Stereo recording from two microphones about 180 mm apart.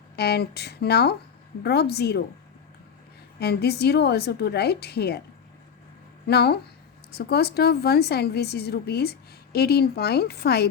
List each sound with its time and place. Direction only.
0.2 s speech: 60° left (ahead or behind)
3.4 s speech: 65° left (ahead or behind)
6.2 s speech: 65° left (ahead or behind)